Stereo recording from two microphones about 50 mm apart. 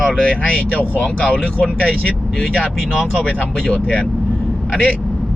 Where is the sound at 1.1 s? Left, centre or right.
Centre.